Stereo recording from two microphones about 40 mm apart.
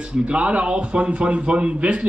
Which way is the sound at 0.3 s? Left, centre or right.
Right.